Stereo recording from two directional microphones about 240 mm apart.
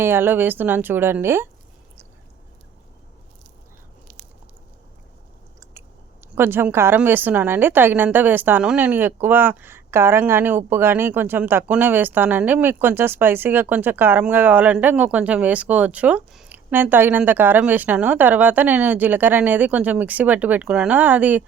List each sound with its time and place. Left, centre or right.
0.0 s speech: centre
6.3 s speech: centre